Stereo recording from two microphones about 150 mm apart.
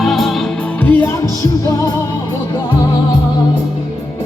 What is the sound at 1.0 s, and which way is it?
Music, 20° left (ahead or behind).